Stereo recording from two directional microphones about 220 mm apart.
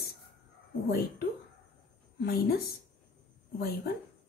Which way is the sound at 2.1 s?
45° left (ahead or behind).